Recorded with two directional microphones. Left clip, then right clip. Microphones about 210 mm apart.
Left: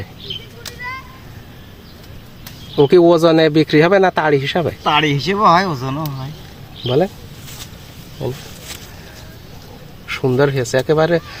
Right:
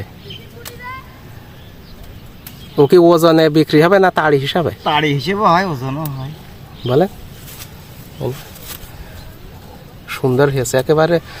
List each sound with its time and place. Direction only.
2.7 s speech: 5° right (ahead or behind)
4.9 s speech: 20° right (ahead or behind)
10.1 s speech: 10° right (ahead or behind)